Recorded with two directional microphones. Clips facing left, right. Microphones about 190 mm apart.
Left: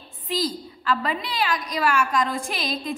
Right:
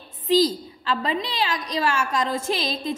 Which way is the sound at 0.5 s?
25° right (ahead or behind).